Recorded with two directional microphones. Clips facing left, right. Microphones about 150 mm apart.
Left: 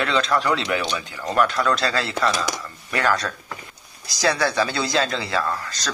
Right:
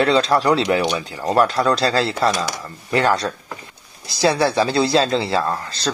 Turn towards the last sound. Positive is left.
turn(degrees=-30)  # may be behind; listen again after turning